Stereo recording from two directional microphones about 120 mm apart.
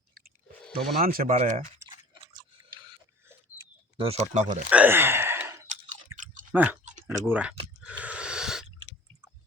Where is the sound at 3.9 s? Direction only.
50° right (ahead or behind).